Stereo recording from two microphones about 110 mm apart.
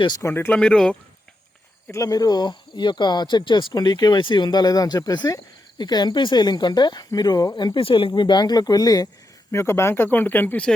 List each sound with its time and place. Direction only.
0.2 s speech: 25° left (ahead or behind)
0.6 s speech: 5° left (ahead or behind)
1.9 s speech: 30° left (ahead or behind)
9.5 s speech: 25° left (ahead or behind)